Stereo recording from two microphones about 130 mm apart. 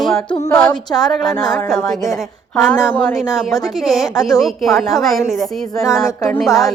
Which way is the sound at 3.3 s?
Centre (ahead or behind).